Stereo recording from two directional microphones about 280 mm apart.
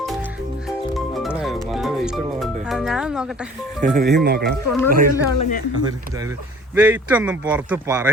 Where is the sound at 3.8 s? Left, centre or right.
Right.